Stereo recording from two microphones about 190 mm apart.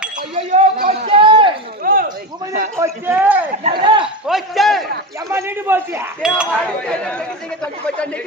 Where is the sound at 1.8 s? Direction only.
50° right (ahead or behind).